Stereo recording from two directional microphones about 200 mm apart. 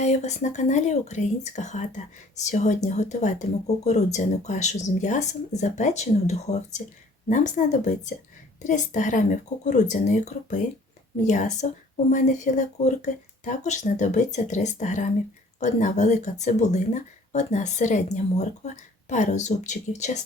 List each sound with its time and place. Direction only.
0.0 s speech: 35° left (ahead or behind)